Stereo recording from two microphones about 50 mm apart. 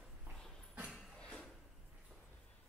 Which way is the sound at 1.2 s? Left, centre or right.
Centre.